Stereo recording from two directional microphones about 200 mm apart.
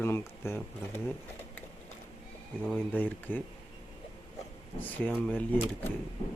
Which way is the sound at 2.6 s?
10° left (ahead or behind).